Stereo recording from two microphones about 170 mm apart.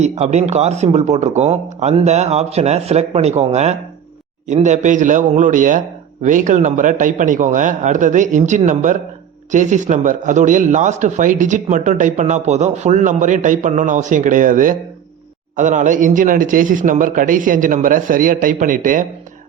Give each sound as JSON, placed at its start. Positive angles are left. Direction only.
{"t": 0.0, "sound": "a man's voice", "side_deg": -40}